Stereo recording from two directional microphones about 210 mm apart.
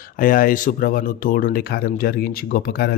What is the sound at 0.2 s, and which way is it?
Speech, 40° left (ahead or behind).